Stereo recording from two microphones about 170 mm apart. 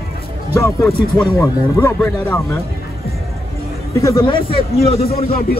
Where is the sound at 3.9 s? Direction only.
20° left (ahead or behind); by 5.4 s 35° left (ahead or behind).